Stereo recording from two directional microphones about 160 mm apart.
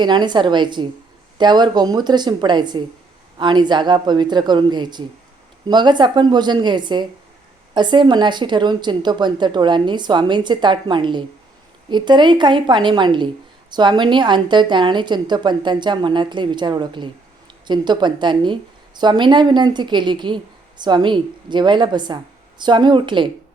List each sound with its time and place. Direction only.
0.0 s a woman's voice: 30° right (ahead or behind)